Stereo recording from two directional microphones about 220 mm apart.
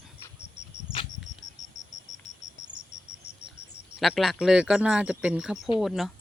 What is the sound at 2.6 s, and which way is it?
Cricket, 20° right (ahead or behind).